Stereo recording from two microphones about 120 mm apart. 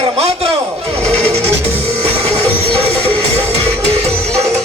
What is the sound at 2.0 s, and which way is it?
Music, 60° right (ahead or behind).